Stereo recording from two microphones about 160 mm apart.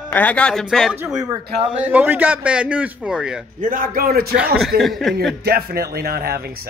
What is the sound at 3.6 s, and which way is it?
Speech, 60° right (ahead or behind).